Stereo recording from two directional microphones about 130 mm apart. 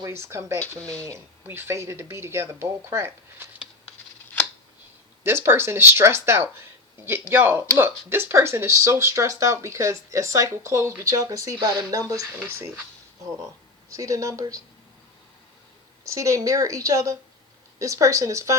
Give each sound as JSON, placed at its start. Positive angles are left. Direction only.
{"t": 0.0, "sound": "speech", "side_deg": -20}
{"t": 5.2, "sound": "speech", "side_deg": -20}
{"t": 13.9, "sound": "speech", "side_deg": -25}
{"t": 16.0, "sound": "speech", "side_deg": -25}